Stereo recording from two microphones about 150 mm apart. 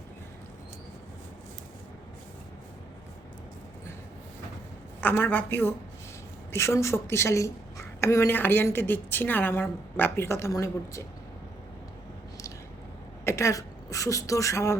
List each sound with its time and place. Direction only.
4.9 s a woman's voice: 15° left (ahead or behind)
13.2 s a woman's voice: 20° left (ahead or behind)